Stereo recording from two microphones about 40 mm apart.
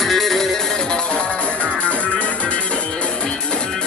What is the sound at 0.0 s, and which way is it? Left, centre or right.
Music, centre.